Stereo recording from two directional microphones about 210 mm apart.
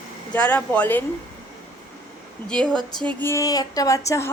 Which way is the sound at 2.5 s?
5° left (ahead or behind).